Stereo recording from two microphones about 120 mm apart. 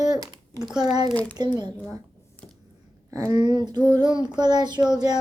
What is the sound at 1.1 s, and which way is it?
Speech, 10° left (ahead or behind).